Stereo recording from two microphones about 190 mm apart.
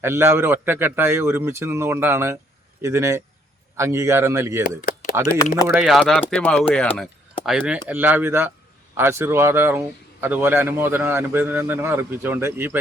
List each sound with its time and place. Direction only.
0.0 s a man's voice: 15° right (ahead or behind)
4.6 s a sound: 50° left (ahead or behind)
5.6 s a man's voice: 5° right (ahead or behind)